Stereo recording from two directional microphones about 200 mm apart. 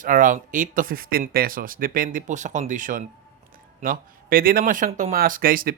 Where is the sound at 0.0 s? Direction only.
40° right (ahead or behind).